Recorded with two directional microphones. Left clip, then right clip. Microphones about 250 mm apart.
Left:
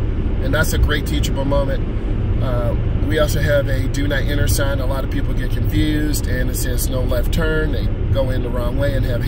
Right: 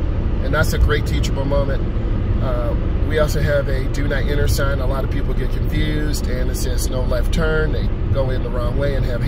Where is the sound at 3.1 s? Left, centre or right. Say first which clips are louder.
Left 1 dB; centre.